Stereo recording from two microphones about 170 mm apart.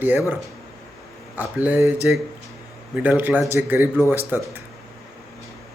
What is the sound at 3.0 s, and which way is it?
Speech, 10° right (ahead or behind).